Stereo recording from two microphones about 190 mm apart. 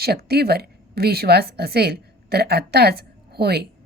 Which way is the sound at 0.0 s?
55° right (ahead or behind).